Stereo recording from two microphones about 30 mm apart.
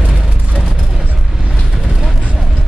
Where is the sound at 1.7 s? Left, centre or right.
Centre.